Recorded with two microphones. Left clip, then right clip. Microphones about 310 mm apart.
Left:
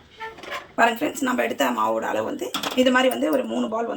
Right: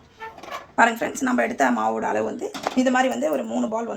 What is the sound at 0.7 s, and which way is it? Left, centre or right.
Speech, centre.